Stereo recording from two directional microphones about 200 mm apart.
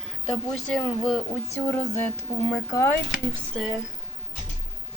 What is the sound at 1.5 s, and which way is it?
Speech, 10° left (ahead or behind).